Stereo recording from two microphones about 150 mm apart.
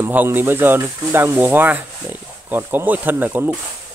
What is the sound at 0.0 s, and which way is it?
Speech, 15° right (ahead or behind).